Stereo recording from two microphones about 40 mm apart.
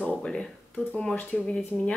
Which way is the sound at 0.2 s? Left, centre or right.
Centre.